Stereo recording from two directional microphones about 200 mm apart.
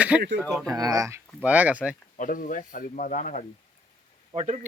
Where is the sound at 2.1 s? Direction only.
40° left (ahead or behind).